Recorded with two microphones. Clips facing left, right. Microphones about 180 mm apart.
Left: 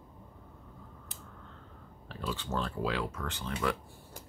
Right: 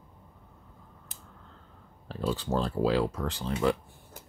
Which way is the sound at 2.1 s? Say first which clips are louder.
Right 7 dB; 35° right (ahead or behind).